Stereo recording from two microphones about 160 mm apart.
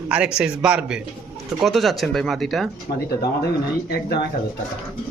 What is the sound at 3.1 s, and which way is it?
Speech, 75° left (ahead or behind).